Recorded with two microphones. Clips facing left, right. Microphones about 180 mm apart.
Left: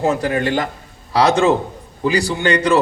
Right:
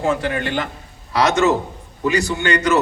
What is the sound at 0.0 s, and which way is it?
A man's voice, 40° left (ahead or behind).